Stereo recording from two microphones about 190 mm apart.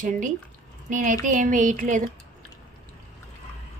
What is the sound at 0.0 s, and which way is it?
Speech, 40° right (ahead or behind).